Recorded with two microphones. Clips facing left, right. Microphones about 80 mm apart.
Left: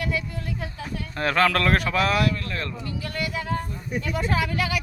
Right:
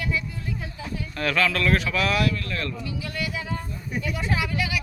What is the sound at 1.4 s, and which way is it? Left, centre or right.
Speech, left.